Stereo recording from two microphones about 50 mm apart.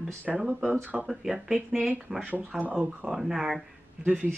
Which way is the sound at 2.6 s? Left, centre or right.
Right.